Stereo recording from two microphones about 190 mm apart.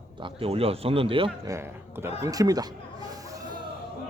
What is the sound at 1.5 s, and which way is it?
Speech, 10° right (ahead or behind).